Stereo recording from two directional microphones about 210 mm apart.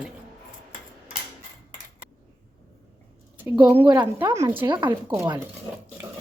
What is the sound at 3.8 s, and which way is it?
Speech, 20° right (ahead or behind).